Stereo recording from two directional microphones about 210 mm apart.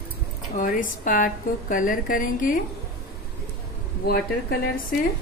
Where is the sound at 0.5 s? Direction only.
40° left (ahead or behind).